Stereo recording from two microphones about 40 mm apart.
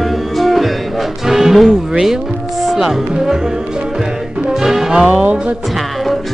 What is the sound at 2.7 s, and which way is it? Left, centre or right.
Speech, centre.